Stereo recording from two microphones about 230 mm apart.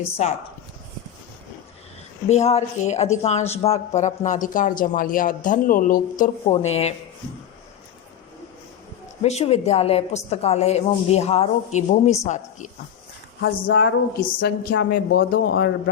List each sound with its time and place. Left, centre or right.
0.0 s a woman's voice: left
2.3 s speech: left
9.2 s a woman's voice: left
13.7 s speech: left
14.3 s speech: left